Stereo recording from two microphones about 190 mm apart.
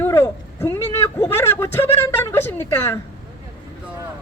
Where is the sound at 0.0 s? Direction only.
15° left (ahead or behind).